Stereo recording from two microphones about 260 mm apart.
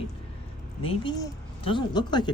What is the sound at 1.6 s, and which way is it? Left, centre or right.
Speech, centre.